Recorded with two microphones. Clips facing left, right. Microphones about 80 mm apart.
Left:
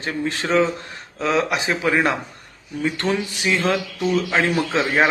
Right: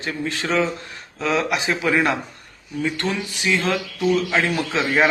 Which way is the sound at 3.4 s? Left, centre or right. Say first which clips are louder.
Even; left.